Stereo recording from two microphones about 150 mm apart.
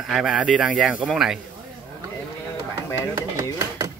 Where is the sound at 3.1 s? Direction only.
20° right (ahead or behind).